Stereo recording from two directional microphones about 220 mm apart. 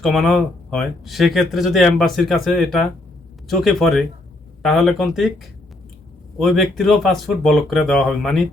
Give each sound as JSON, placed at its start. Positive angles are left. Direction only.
{"t": 0.0, "sound": "speech", "side_deg": 0}